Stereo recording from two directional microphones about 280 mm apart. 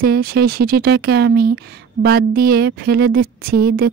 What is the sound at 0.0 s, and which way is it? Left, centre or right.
Speech, right.